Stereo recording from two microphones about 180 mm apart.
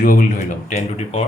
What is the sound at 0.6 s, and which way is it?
Speech, 40° left (ahead or behind).